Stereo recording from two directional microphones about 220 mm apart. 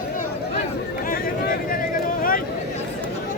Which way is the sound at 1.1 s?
40° left (ahead or behind).